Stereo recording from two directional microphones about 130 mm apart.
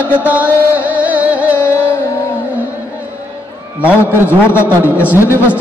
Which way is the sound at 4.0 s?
15° left (ahead or behind).